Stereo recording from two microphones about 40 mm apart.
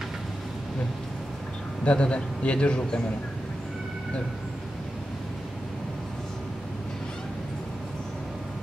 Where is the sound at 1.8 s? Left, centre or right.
Left.